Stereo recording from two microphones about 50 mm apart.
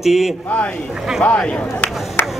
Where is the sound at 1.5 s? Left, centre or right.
Left.